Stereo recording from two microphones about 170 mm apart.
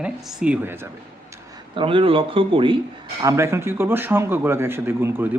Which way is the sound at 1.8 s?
30° right (ahead or behind).